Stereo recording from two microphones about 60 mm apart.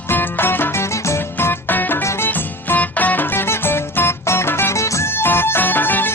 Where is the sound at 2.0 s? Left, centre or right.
Left.